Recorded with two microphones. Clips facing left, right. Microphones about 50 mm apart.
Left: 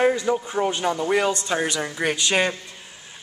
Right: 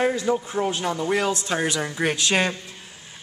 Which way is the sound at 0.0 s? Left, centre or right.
Centre.